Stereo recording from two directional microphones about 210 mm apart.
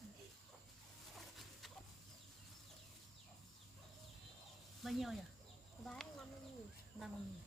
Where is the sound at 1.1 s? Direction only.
Centre (ahead or behind).